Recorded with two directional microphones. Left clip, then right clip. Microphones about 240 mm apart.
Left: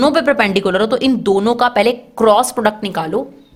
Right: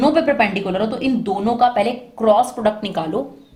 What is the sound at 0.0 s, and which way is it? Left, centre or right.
A woman's voice, left.